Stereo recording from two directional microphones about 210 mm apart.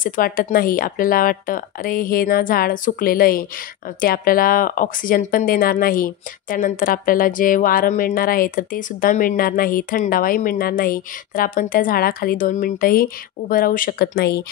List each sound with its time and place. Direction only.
0.0 s speech: 40° left (ahead or behind)